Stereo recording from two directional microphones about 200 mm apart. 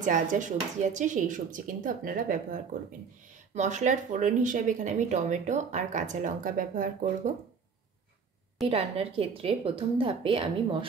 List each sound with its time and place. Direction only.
0.0 s speech: 40° right (ahead or behind)
8.6 s a woman's voice: 30° right (ahead or behind)